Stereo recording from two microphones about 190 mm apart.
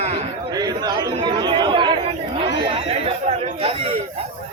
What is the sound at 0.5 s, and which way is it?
Chatter, 20° right (ahead or behind).